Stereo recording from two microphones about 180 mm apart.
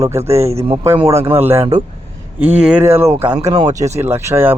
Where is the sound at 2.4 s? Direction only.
5° right (ahead or behind).